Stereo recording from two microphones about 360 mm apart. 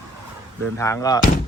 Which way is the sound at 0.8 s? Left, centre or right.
Centre.